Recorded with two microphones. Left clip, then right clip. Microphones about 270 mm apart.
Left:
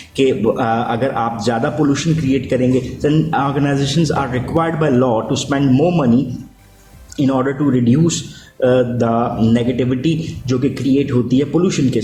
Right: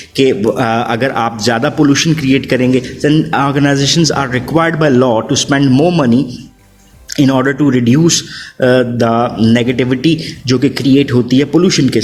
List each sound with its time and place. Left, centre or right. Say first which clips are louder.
0.2 s a man's voice: right 4 dB; right
7.2 s a man's voice: right 5 dB; right